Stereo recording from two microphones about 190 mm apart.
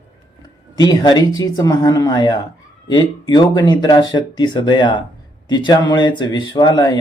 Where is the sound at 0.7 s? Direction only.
20° left (ahead or behind).